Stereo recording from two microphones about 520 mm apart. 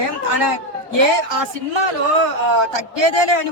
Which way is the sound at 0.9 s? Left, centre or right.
Right.